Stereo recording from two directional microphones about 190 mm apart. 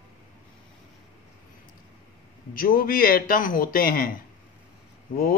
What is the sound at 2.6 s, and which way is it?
A man's voice, 50° left (ahead or behind).